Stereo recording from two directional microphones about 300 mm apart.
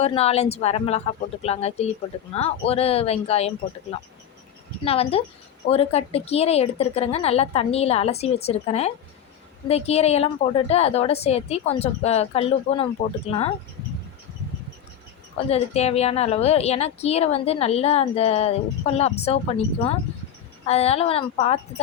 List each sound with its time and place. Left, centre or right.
0.0 s a woman's voice: centre
15.4 s a woman's voice: left